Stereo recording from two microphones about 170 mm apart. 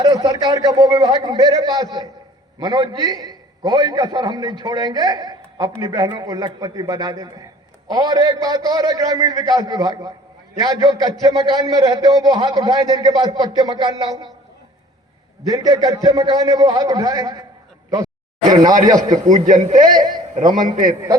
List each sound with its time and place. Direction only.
0.0 s a man's voice: 20° right (ahead or behind)
15.4 s a man's voice: 20° right (ahead or behind)
17.9 s a sound: 20° right (ahead or behind)
18.9 s a man's voice: 25° right (ahead or behind)
19.3 s a man's voice: 45° right (ahead or behind)
19.9 s a sound: 25° right (ahead or behind)
20.5 s a man's voice: 50° right (ahead or behind)